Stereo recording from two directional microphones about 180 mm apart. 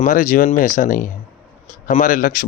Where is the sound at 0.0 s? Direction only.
45° left (ahead or behind).